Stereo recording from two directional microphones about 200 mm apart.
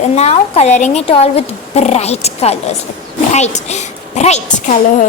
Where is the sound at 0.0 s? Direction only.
30° left (ahead or behind).